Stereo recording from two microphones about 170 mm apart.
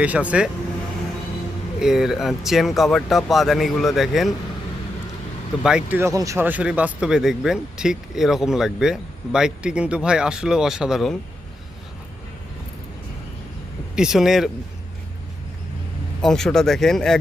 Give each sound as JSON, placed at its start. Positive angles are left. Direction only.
{"t": 0.0, "sound": "speech", "side_deg": -10}
{"t": 1.8, "sound": "a man's voice", "side_deg": -5}
{"t": 5.6, "sound": "a man's voice", "side_deg": -5}
{"t": 13.9, "sound": "a man's voice", "side_deg": -5}
{"t": 16.2, "sound": "a man's voice", "side_deg": 5}